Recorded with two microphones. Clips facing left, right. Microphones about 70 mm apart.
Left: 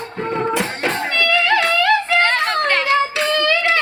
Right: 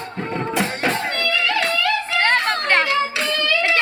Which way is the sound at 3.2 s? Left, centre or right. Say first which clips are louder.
Left 4 dB; left.